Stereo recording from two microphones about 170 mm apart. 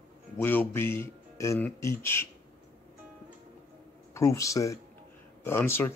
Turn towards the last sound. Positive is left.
turn(degrees=15)  # may be behind; listen again after turning